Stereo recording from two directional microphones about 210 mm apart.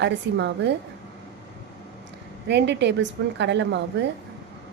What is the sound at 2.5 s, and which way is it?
A woman's voice, 55° right (ahead or behind).